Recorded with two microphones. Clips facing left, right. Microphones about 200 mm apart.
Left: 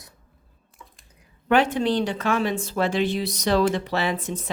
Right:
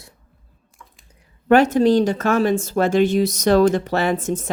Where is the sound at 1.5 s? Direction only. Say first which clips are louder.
Right 7 dB; 45° right (ahead or behind).